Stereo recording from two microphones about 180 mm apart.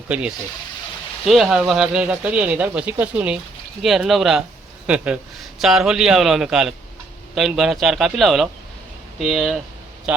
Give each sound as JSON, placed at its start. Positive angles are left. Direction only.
{"t": 0.1, "sound": "a man's voice", "side_deg": -5}